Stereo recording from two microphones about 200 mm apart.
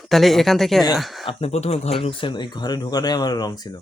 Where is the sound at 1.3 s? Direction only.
30° left (ahead or behind).